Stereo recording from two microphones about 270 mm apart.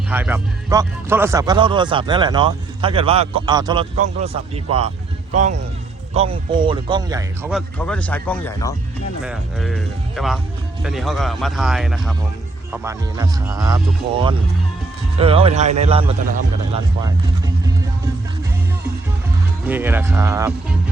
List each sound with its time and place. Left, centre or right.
0.1 s speech: centre
7.5 s speech: centre; by 16.1 s right
19.6 s speech: centre